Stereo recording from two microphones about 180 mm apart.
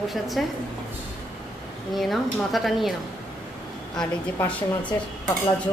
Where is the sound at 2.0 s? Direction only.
Centre (ahead or behind).